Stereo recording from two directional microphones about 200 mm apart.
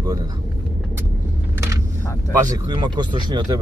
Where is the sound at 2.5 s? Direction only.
20° right (ahead or behind).